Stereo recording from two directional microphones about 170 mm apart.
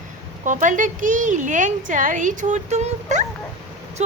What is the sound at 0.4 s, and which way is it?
A woman's voice, 50° right (ahead or behind).